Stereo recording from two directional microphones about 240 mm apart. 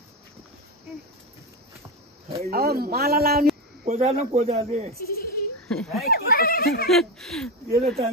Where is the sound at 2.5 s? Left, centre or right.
Right.